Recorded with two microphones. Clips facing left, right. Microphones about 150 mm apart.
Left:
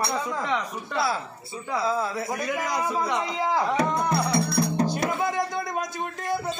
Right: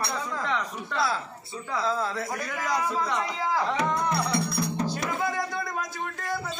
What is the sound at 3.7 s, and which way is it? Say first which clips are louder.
Music: left 3 dB; 35° left (ahead or behind).